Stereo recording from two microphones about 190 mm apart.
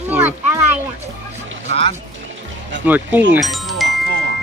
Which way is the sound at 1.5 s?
70° right (ahead or behind).